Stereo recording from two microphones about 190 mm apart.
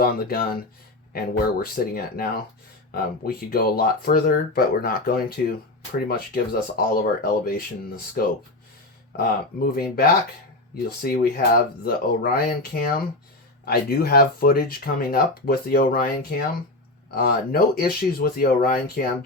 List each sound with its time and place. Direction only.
0.0 s speech: 50° left (ahead or behind)
17.2 s speech: 55° left (ahead or behind)